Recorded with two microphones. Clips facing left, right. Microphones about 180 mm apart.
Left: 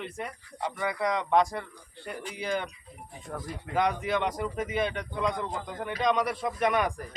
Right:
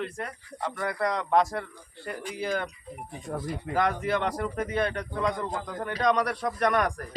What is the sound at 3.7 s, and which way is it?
Speech, centre (ahead or behind).